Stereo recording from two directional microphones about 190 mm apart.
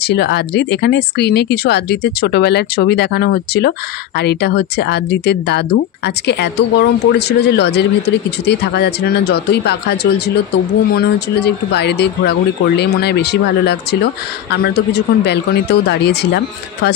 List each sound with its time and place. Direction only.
0.0 s speech: 60° left (ahead or behind)